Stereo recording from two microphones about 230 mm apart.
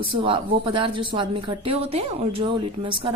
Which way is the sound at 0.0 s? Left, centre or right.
Right.